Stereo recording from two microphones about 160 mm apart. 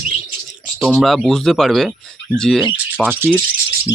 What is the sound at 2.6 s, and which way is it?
Speech, 10° right (ahead or behind).